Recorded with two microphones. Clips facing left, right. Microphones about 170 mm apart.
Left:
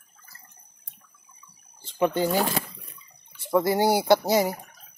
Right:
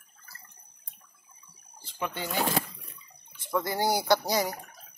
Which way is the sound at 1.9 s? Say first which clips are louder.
Left 10 dB; 40° left (ahead or behind).